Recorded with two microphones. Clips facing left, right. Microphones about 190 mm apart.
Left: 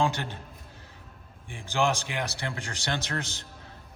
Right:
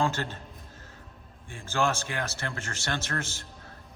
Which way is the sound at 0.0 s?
15° left (ahead or behind).